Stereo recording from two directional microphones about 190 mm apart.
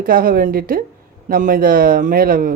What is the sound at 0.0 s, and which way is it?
Speech, 50° right (ahead or behind).